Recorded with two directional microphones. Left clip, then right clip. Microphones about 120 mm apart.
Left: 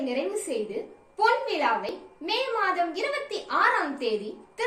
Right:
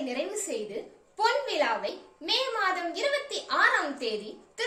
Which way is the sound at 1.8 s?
40° right (ahead or behind).